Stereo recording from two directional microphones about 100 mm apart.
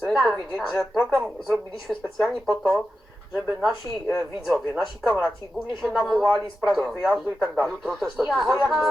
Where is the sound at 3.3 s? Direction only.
20° right (ahead or behind).